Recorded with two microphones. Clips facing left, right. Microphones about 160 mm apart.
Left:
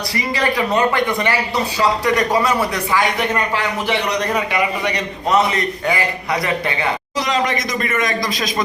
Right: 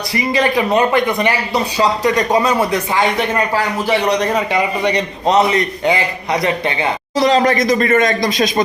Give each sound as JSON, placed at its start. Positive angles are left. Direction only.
{"t": 0.3, "sound": "a man's voice", "side_deg": -15}
{"t": 4.4, "sound": "a man's voice", "side_deg": -25}
{"t": 7.2, "sound": "speech", "side_deg": -35}